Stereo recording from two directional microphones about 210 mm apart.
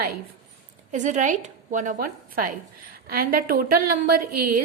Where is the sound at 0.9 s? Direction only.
35° right (ahead or behind).